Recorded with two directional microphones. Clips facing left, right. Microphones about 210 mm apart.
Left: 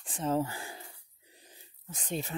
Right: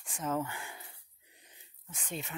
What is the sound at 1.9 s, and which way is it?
Speech, 35° left (ahead or behind).